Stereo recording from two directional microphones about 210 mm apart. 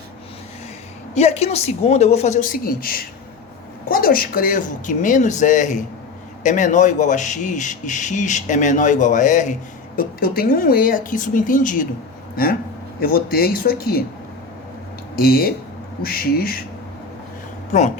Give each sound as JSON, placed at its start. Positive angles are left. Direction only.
{"t": 1.1, "sound": "a man's voice", "side_deg": 30}
{"t": 15.1, "sound": "speech", "side_deg": 45}
{"t": 17.7, "sound": "speech", "side_deg": 35}